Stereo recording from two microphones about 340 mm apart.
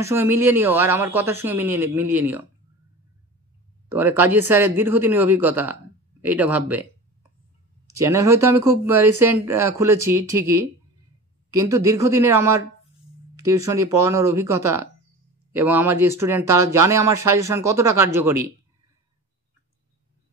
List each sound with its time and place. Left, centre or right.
0.0 s speech: centre
3.9 s speech: centre
8.0 s speech: centre